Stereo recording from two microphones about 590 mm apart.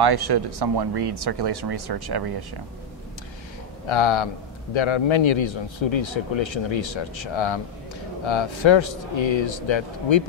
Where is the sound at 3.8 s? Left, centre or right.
Left.